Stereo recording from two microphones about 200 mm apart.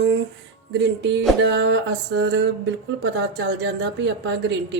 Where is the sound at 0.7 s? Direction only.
60° right (ahead or behind).